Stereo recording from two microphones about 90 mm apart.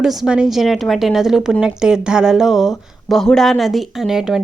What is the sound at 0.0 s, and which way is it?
A woman's voice, 5° right (ahead or behind).